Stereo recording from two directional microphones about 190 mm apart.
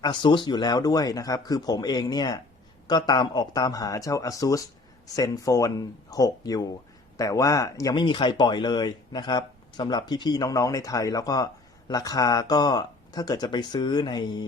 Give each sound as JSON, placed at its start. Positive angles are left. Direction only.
{"t": 0.0, "sound": "speech", "side_deg": 25}